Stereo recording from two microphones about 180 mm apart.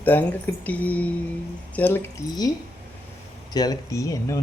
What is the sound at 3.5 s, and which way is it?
Speech, 20° left (ahead or behind).